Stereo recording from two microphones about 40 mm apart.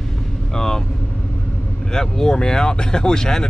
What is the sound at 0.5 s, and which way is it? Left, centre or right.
Speech, centre.